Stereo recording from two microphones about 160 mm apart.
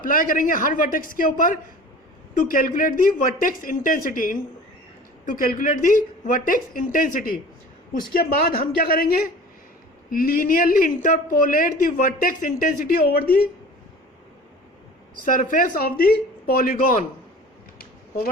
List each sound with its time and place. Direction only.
0.0 s speech: 60° left (ahead or behind)
15.2 s speech: 60° left (ahead or behind)